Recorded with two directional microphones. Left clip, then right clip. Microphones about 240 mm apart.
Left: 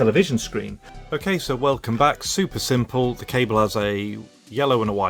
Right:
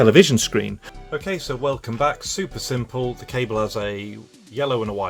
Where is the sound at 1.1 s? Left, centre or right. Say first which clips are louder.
Left 2 dB; left.